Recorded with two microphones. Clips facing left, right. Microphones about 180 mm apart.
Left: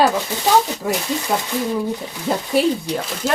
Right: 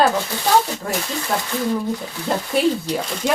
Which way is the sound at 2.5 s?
Centre (ahead or behind).